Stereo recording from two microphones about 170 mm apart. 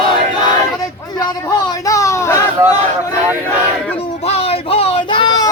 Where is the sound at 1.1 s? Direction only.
20° left (ahead or behind).